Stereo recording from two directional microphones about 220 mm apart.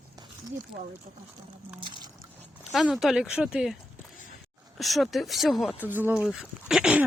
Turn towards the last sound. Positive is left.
turn(degrees=-5)  # may be behind; listen again after turning